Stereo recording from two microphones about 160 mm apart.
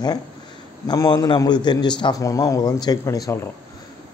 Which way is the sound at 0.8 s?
25° left (ahead or behind).